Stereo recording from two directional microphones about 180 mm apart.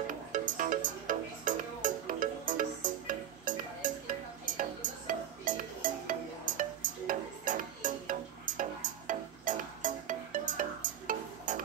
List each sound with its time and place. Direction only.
0.3 s music: 50° right (ahead or behind)